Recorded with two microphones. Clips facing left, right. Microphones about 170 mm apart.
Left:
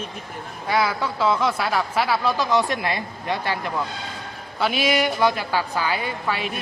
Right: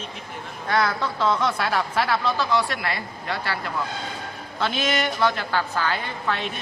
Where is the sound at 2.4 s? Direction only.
20° left (ahead or behind).